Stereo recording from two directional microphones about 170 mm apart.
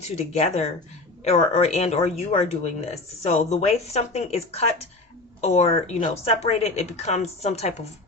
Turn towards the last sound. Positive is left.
turn(degrees=40)  # may be behind; listen again after turning